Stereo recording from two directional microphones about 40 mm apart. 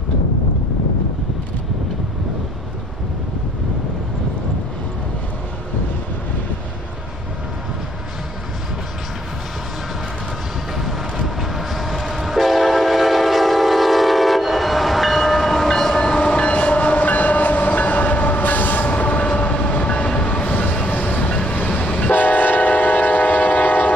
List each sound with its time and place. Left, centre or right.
10.8 s train: centre
16.2 s train: left
20.2 s vehicle: left